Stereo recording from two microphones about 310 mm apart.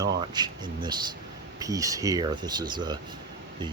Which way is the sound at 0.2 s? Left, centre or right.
Centre.